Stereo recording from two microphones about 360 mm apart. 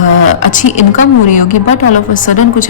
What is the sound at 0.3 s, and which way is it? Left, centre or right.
A woman's voice, left.